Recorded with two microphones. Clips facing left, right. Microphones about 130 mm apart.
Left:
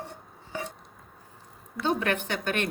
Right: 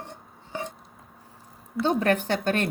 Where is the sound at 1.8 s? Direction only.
40° right (ahead or behind).